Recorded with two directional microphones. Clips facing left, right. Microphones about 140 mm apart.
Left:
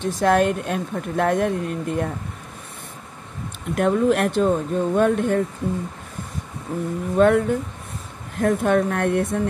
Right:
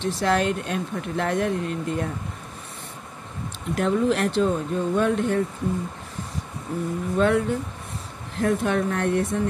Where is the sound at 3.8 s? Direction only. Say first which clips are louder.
Left 3 dB; 55° left (ahead or behind).